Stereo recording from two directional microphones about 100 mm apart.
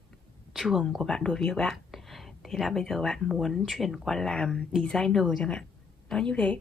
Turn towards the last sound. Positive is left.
turn(degrees=10)  # may be behind; listen again after turning